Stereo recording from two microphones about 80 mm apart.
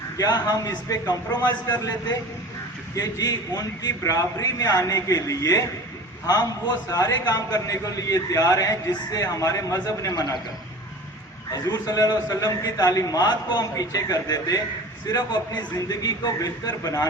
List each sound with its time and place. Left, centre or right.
0.2 s a man's voice: left
4.0 s a man's voice: left
11.5 s a man's voice: left